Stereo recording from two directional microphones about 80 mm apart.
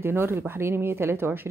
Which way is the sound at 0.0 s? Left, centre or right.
Right.